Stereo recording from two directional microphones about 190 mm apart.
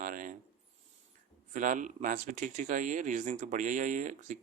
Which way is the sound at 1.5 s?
40° right (ahead or behind).